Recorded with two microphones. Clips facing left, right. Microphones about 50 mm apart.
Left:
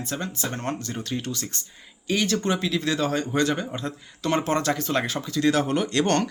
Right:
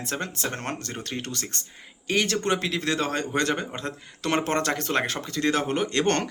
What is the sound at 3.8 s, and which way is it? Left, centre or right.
Speech, right.